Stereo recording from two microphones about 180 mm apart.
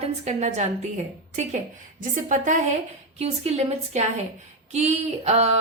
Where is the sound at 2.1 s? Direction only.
45° right (ahead or behind).